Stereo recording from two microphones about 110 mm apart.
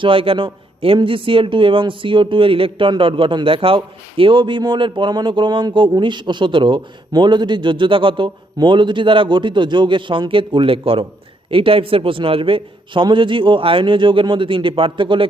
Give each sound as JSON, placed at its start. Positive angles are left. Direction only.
{"t": 0.0, "sound": "a man's voice", "side_deg": -55}